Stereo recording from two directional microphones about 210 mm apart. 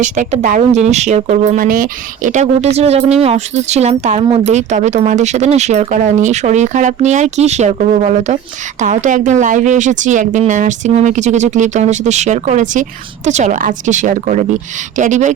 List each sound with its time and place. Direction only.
0.0 s speech: 35° right (ahead or behind)